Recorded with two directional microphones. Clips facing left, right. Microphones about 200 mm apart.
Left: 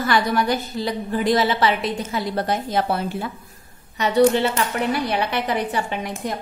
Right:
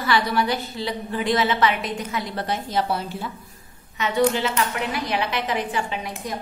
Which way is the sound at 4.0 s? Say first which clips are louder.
Left 4 dB; 35° left (ahead or behind).